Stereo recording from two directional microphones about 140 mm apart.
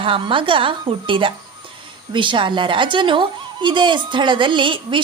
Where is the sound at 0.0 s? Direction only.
40° right (ahead or behind).